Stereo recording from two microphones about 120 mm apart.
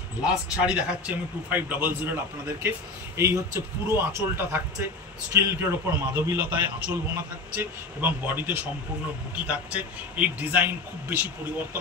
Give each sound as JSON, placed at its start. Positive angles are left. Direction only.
{"t": 0.2, "sound": "a man's voice", "side_deg": -10}